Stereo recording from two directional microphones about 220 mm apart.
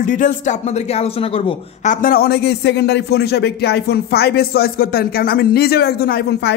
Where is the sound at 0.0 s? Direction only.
35° left (ahead or behind).